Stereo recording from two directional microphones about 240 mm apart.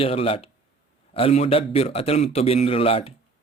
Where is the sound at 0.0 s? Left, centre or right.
Left.